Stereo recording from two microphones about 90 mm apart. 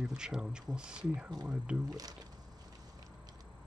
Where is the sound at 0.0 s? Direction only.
10° right (ahead or behind).